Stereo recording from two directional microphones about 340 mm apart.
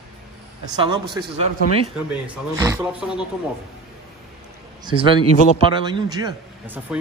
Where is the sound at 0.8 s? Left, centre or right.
Centre.